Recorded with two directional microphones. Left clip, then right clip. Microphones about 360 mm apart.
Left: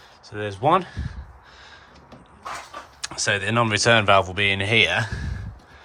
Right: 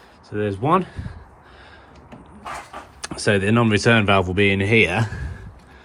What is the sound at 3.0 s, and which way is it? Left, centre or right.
Speech, centre.